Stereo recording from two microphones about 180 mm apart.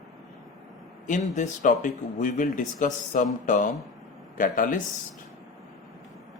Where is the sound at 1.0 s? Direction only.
40° left (ahead or behind).